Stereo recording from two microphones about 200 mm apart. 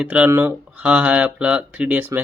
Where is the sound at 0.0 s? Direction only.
5° right (ahead or behind).